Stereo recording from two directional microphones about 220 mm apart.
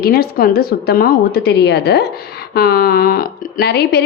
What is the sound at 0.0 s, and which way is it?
A woman's voice, 45° left (ahead or behind).